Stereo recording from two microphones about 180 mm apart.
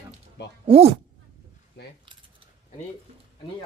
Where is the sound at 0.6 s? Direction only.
35° right (ahead or behind).